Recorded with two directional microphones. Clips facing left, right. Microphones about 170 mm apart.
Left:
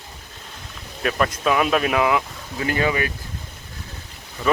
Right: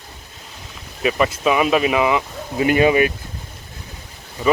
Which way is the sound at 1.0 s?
5° right (ahead or behind).